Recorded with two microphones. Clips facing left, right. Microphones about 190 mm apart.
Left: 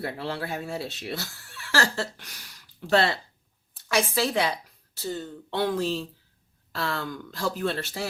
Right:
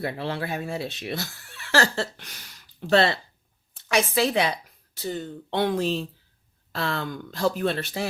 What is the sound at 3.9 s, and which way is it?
Speech, 20° right (ahead or behind).